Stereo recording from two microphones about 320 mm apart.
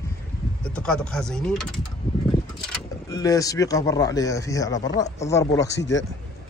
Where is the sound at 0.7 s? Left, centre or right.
Centre.